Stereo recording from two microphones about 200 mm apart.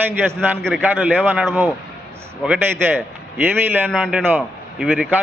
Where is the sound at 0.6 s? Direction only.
5° right (ahead or behind).